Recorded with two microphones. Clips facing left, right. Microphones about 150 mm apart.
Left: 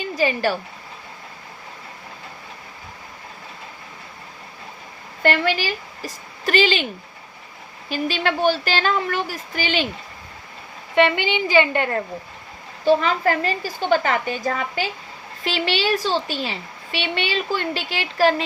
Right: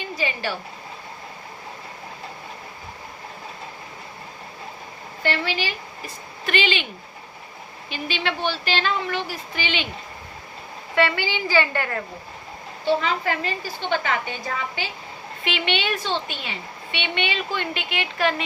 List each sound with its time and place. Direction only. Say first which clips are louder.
0.2 s speech: left 8 dB; 45° left (ahead or behind)
5.2 s a woman's voice: left 5 dB; 50° left (ahead or behind)
7.9 s a child's voice: left 5 dB; 40° left (ahead or behind)
10.9 s a child's voice: left 4 dB; 20° left (ahead or behind)
12.8 s a child's voice: left 5 dB; 40° left (ahead or behind)